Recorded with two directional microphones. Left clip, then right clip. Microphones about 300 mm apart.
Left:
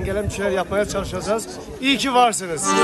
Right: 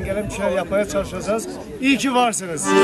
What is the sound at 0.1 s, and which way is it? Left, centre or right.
A man's voice, centre.